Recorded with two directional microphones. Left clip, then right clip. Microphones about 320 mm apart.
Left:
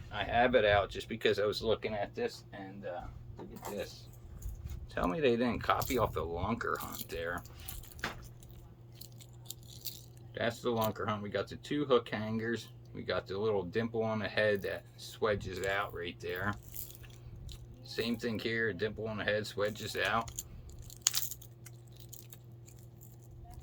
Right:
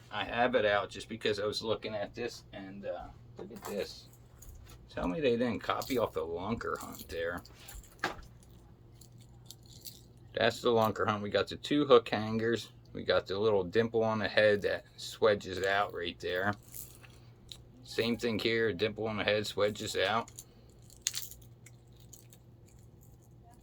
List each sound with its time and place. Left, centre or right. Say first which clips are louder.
0.1 s speech: left 1 dB; centre
4.9 s speech: even; centre
9.9 s keys jangling: left 5 dB; centre
10.3 s speech: right 6 dB; centre
21.0 s a sound: left 4 dB; centre